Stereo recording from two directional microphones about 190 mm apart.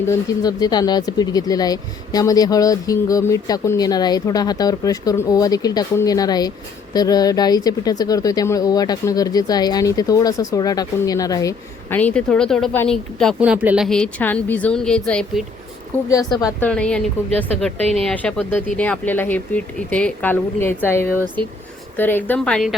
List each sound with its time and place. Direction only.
0.0 s speech: 15° left (ahead or behind)
13.4 s a woman's voice: 10° right (ahead or behind)
16.0 s a woman's voice: 20° left (ahead or behind); by 22.8 s centre (ahead or behind)